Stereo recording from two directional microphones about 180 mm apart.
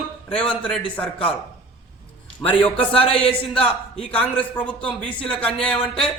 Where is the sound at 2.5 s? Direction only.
5° left (ahead or behind).